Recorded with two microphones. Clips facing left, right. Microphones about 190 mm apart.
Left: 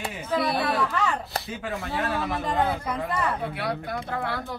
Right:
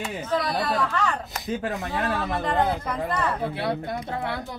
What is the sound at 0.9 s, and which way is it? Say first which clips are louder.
Chopping: even; 5° left (ahead or behind).